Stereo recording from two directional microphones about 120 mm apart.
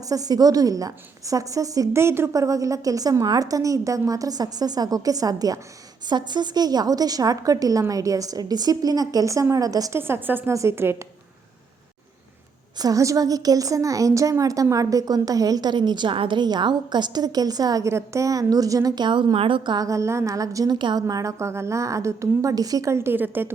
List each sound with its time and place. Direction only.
0.1 s a woman's voice: 30° right (ahead or behind)
10.0 s a woman's voice: 15° right (ahead or behind)
12.8 s a woman's voice: 30° right (ahead or behind)